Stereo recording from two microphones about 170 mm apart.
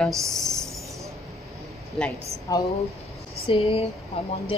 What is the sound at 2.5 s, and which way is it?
Speech, 20° left (ahead or behind).